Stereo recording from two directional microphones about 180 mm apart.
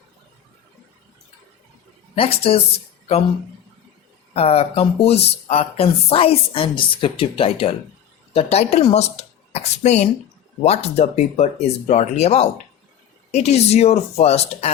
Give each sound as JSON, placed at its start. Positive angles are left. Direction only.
{"t": 2.1, "sound": "speech", "side_deg": 35}
{"t": 4.4, "sound": "speech", "side_deg": 35}